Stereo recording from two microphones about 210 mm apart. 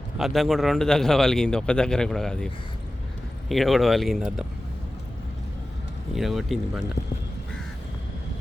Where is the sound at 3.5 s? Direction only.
Centre (ahead or behind).